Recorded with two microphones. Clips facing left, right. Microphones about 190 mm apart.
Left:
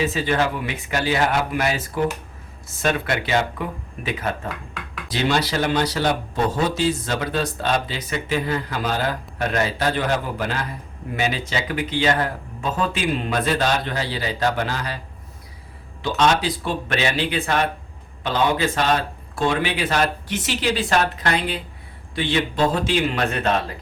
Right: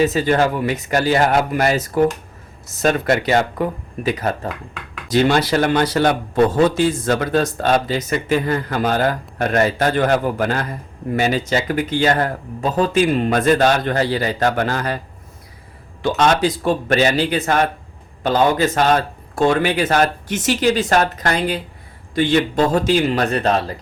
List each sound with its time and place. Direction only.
0.0 s a man's voice: 40° right (ahead or behind)
16.0 s a man's voice: 50° right (ahead or behind)